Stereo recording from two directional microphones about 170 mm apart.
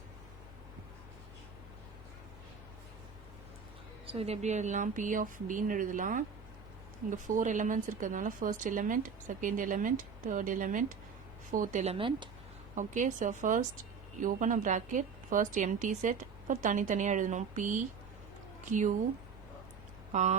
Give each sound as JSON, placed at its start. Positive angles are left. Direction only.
{"t": 4.0, "sound": "speech", "side_deg": -35}
{"t": 12.7, "sound": "speech", "side_deg": -45}
{"t": 20.1, "sound": "speech", "side_deg": -45}